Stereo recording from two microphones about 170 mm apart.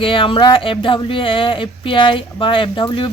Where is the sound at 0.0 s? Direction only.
30° left (ahead or behind).